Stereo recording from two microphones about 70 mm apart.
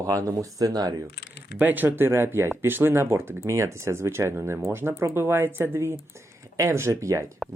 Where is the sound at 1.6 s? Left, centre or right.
Right.